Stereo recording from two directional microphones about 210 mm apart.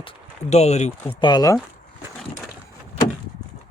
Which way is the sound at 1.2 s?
20° left (ahead or behind).